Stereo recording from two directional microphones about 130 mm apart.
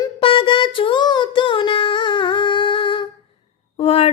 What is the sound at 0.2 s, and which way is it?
Child singing, 40° left (ahead or behind).